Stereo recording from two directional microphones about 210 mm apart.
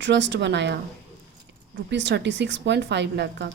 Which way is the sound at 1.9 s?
55° right (ahead or behind).